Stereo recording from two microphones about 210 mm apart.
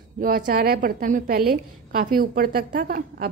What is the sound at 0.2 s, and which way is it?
A woman's voice, 40° right (ahead or behind).